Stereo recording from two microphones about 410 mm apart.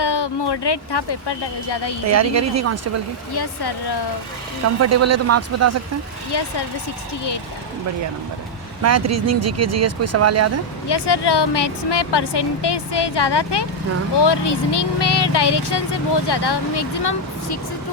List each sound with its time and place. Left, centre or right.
0.0 s speech: left
2.0 s speech: right
3.3 s speech: left
4.6 s speech: right
6.3 s speech: left
8.8 s speech: right
10.8 s speech: left